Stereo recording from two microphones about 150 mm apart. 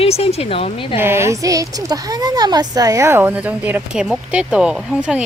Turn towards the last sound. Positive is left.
turn(degrees=-5)  # may be behind; listen again after turning